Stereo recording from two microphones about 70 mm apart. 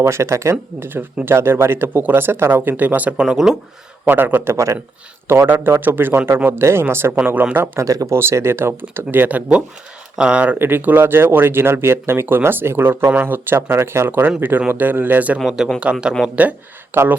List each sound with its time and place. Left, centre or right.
0.0 s speech: right
0.8 s speech: right
3.2 s speech: centre
4.0 s speech: right
5.5 s speech: right
7.8 s speech: right
8.1 s speech: right
15.4 s speech: centre